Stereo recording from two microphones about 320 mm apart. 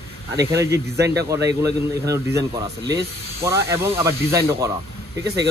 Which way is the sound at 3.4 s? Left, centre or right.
Centre.